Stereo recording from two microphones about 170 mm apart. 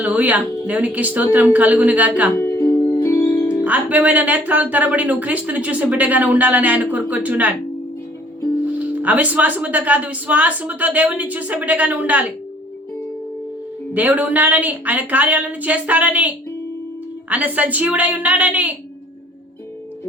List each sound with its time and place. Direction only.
0.0 s speech: 10° right (ahead or behind)
2.4 s music: 15° left (ahead or behind)
3.6 s speech: 10° right (ahead or behind)
8.6 s speech: 10° right (ahead or behind)
13.9 s speech: 10° right (ahead or behind)